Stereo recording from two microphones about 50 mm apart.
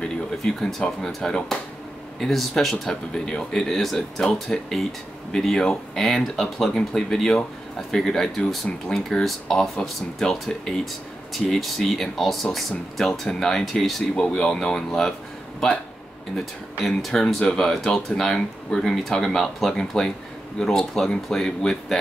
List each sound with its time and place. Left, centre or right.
0.0 s speech: centre
14.2 s speech: left
16.8 s speech: centre